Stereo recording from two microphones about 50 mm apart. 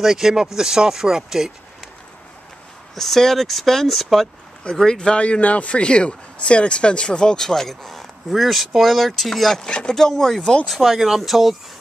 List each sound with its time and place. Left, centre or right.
0.0 s speech: centre
3.0 s speech: centre
4.7 s speech: centre
9.7 s speech: centre
9.9 s speech: centre